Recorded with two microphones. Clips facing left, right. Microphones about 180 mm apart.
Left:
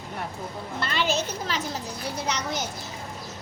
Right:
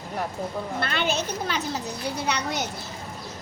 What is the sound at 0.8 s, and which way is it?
Speech, 55° right (ahead or behind).